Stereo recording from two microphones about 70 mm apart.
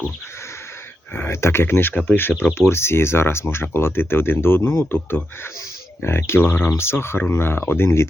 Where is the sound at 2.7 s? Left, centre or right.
Left.